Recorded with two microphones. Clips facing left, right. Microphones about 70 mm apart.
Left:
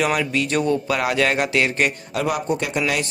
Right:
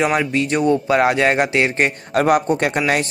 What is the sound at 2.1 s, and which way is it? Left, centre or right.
Speech, right.